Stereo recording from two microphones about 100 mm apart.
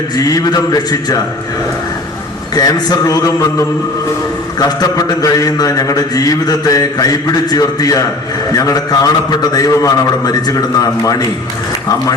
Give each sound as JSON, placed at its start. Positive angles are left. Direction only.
{"t": 0.2, "sound": "a man's voice", "side_deg": 40}
{"t": 2.6, "sound": "a man's voice", "side_deg": 40}